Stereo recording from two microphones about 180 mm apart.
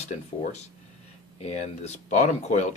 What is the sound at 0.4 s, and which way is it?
Speech, 35° left (ahead or behind).